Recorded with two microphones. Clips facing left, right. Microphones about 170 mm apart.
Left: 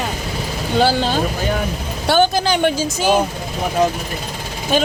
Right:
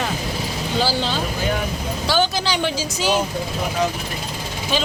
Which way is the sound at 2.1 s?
50° left (ahead or behind).